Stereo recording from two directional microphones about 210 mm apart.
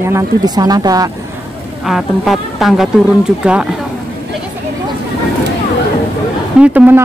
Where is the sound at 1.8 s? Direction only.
Centre (ahead or behind).